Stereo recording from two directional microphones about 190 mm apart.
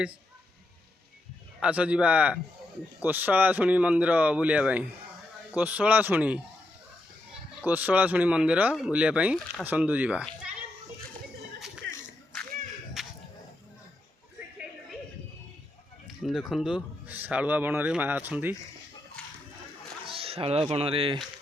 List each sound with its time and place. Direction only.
1.6 s speech: 5° right (ahead or behind)
7.6 s speech: 10° right (ahead or behind)
11.8 s a sound: 70° right (ahead or behind)
13.0 s a sound: centre (ahead or behind)
16.0 s speech: centre (ahead or behind)
20.1 s speech: 30° right (ahead or behind)